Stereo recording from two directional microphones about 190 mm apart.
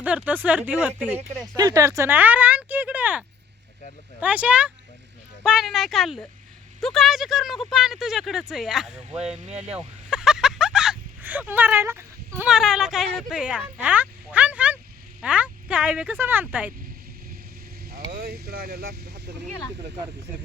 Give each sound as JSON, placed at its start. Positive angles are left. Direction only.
{"t": 0.0, "sound": "speech", "side_deg": -5}
{"t": 18.1, "sound": "speech", "side_deg": -55}